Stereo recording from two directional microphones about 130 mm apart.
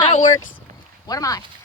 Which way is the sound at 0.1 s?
75° left (ahead or behind).